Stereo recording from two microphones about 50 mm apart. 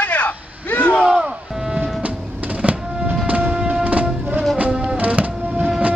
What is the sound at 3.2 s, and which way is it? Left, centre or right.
Music, right.